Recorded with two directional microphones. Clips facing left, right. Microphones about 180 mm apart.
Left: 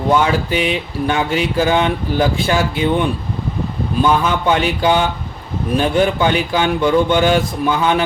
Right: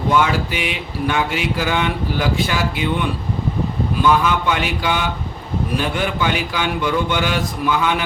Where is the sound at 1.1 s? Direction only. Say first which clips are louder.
Left 5 dB; 30° left (ahead or behind).